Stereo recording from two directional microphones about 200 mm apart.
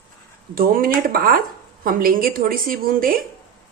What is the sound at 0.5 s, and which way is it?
A woman's voice, 45° right (ahead or behind).